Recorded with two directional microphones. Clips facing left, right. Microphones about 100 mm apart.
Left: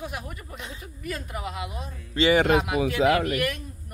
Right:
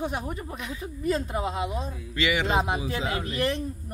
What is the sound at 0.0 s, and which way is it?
Speech, 30° right (ahead or behind).